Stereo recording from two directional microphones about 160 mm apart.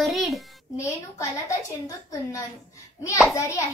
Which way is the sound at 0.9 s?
20° left (ahead or behind).